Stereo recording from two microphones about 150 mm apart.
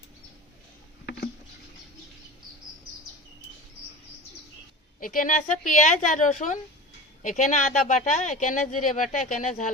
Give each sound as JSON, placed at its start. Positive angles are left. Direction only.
{"t": 4.9, "sound": "a woman's voice", "side_deg": 70}